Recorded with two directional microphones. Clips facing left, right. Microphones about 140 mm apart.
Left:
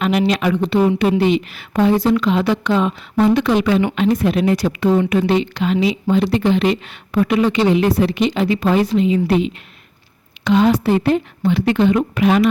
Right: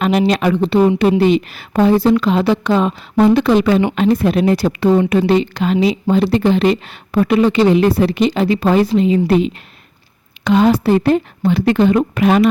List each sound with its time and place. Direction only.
0.0 s speech: 35° right (ahead or behind)